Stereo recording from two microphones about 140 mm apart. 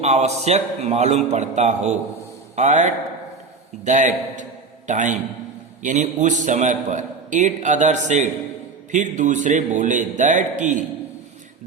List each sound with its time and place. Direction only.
0.0 s a man's voice: 50° right (ahead or behind)